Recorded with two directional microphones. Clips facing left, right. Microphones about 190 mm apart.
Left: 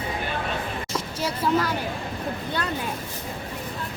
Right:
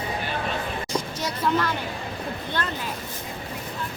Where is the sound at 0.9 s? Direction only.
10° left (ahead or behind).